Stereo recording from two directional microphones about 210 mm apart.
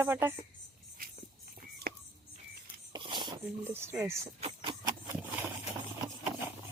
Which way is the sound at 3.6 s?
10° right (ahead or behind).